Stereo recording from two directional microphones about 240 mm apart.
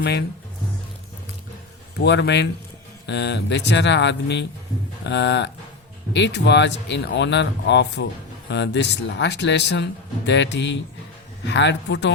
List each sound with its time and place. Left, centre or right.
0.0 s speech: left
2.0 s speech: left